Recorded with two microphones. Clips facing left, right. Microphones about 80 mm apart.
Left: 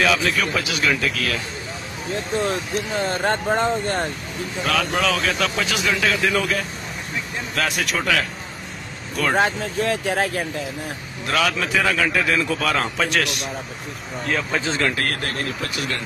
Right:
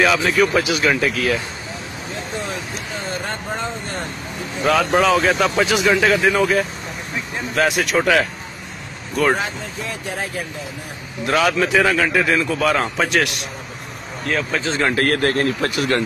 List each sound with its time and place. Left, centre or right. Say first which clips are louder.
0.0 s speech: right 4 dB; centre
3.3 s speech: left 6 dB; left
5.0 s speech: right 6 dB; centre
7.5 s speech: right 6 dB; centre
9.4 s speech: left 6 dB; left
11.2 s speech: right 4 dB; centre
14.3 s speech: right 2 dB; centre
14.9 s speech: right 7 dB; right